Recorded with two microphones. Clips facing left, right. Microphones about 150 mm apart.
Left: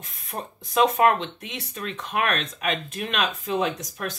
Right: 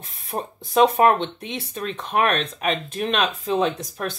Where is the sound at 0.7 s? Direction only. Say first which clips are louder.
Right 3 dB; 30° right (ahead or behind).